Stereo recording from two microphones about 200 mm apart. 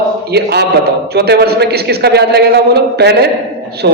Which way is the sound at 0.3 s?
55° right (ahead or behind).